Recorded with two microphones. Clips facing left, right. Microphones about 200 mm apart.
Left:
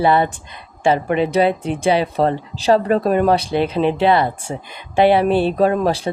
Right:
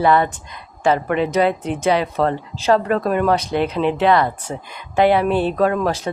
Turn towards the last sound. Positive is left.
turn(degrees=30)  # may be behind; listen again after turning